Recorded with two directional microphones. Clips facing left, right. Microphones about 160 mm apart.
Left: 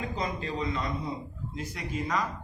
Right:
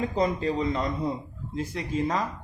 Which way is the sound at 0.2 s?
35° right (ahead or behind).